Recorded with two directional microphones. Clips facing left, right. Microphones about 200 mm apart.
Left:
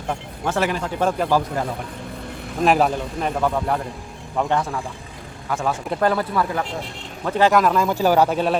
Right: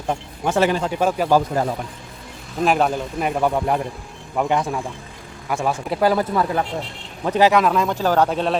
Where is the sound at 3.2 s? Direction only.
15° right (ahead or behind).